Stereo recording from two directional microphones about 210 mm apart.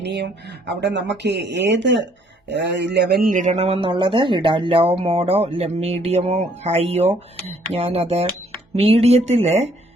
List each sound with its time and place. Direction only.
0.0 s a man's voice: 55° right (ahead or behind); by 9.6 s 30° right (ahead or behind)